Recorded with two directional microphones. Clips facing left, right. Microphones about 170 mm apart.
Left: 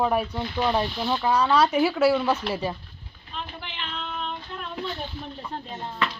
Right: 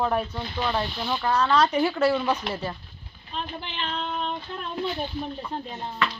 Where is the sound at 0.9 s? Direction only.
5° left (ahead or behind).